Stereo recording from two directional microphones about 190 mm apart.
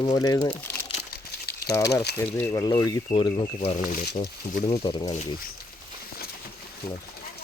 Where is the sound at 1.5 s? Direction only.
15° left (ahead or behind).